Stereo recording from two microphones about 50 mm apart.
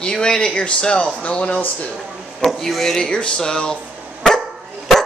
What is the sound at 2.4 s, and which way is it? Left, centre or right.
Speech, centre.